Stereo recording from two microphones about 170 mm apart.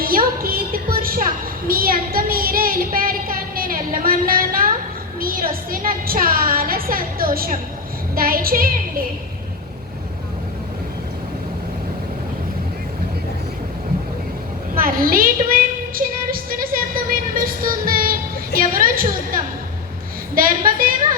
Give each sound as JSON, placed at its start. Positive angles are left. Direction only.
{"t": 0.0, "sound": "music", "side_deg": -60}
{"t": 1.6, "sound": "child singing", "side_deg": -60}
{"t": 5.2, "sound": "a sound", "side_deg": -60}
{"t": 8.1, "sound": "a woman's voice", "side_deg": -60}
{"t": 14.8, "sound": "a sound", "side_deg": -55}
{"t": 20.3, "sound": "a woman's voice", "side_deg": -55}